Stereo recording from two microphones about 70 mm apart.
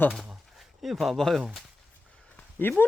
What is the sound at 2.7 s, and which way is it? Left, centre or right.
Speech, left.